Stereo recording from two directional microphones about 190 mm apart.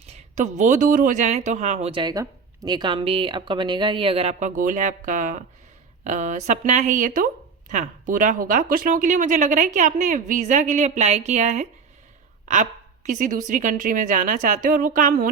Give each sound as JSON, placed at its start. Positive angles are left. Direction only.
{"t": 0.0, "sound": "a woman's voice", "side_deg": -35}